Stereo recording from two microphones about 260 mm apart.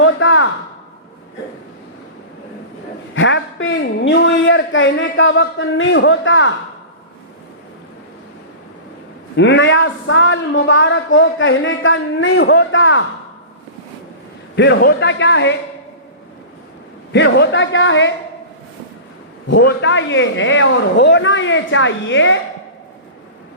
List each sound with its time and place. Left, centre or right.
0.0 s a sound: left
3.2 s speech: left
9.3 s speech: left
14.5 s speech: left
17.1 s speech: left
19.5 s speech: left